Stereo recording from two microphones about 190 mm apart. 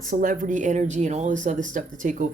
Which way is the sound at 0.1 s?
45° right (ahead or behind).